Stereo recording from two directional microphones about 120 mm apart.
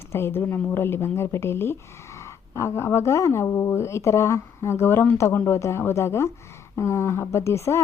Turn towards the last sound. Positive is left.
turn(degrees=25)  # may be behind; listen again after turning